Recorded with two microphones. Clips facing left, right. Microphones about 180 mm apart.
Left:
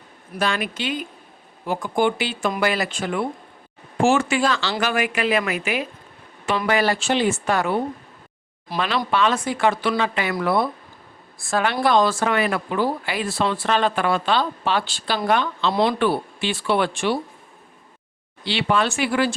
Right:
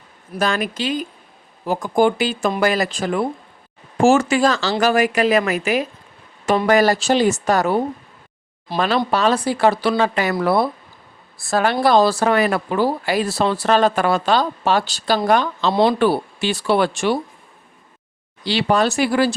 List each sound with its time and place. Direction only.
0.3 s speech: 40° right (ahead or behind)
9.0 s speech: 40° right (ahead or behind)
15.7 s speech: 30° right (ahead or behind)
18.4 s speech: 40° right (ahead or behind)